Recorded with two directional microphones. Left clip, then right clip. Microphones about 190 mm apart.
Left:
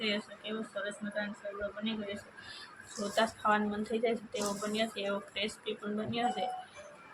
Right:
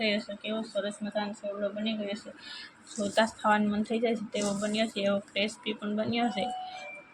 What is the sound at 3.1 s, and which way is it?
Speech, 20° right (ahead or behind).